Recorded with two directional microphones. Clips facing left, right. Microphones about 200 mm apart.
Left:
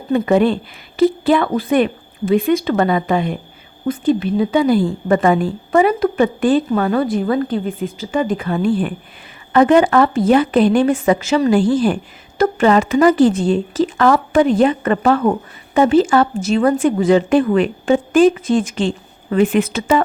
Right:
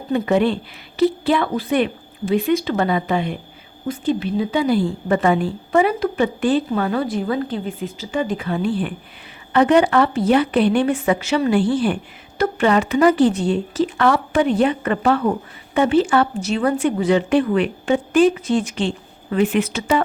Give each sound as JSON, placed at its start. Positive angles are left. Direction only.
{"t": 0.1, "sound": "a woman's voice", "side_deg": 50}